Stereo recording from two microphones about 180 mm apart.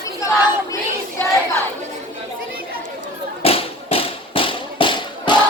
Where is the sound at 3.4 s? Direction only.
35° left (ahead or behind).